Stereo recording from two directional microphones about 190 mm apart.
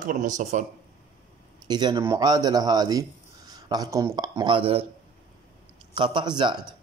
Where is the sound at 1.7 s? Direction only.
20° right (ahead or behind).